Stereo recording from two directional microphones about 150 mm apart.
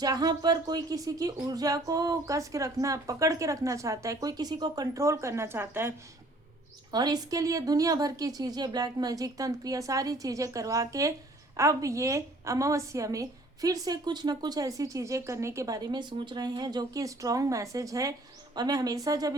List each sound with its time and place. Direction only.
0.0 s a woman's voice: 25° right (ahead or behind)
6.9 s a woman's voice: 25° right (ahead or behind)